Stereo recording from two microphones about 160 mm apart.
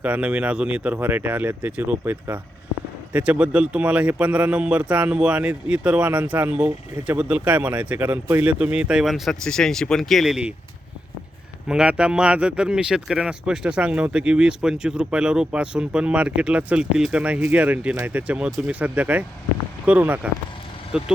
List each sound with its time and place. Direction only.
0.0 s speech: 10° right (ahead or behind)
11.7 s speech: 5° right (ahead or behind)